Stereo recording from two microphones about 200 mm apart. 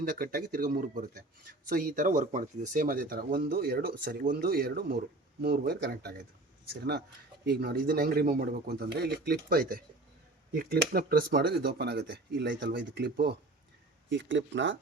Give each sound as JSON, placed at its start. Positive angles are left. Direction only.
{"t": 0.1, "sound": "speech", "side_deg": -45}
{"t": 7.4, "sound": "speech", "side_deg": -55}